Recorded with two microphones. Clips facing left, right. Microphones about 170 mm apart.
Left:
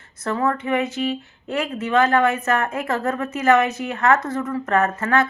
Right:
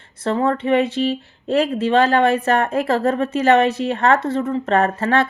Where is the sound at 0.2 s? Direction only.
30° right (ahead or behind).